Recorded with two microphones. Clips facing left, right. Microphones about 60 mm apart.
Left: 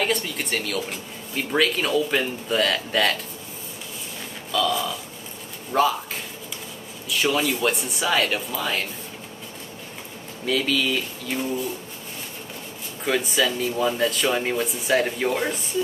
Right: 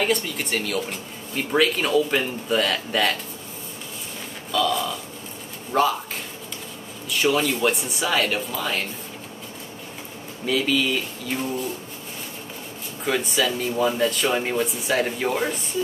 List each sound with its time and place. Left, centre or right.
0.0 s speech: centre
4.5 s speech: centre
7.1 s speech: centre
10.4 s speech: centre
13.0 s speech: centre